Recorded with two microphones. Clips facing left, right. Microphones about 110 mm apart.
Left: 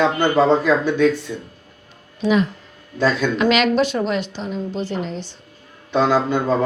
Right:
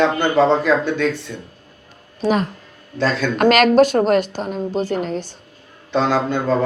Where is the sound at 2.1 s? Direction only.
40° right (ahead or behind).